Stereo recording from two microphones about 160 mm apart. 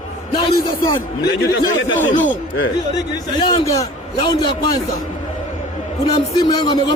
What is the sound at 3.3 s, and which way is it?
A man's voice, 25° left (ahead or behind).